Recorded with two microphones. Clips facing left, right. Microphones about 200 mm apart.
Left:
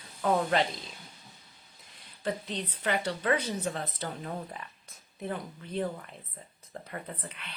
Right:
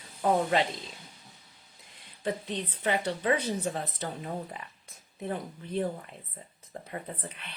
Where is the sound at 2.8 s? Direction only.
20° right (ahead or behind).